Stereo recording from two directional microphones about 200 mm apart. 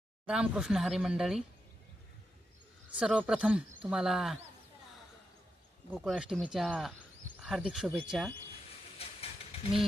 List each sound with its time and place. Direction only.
0.3 s speech: 5° right (ahead or behind)
2.9 s speech: 5° right (ahead or behind)
5.9 s speech: 5° right (ahead or behind)
9.0 s a sound: 30° left (ahead or behind)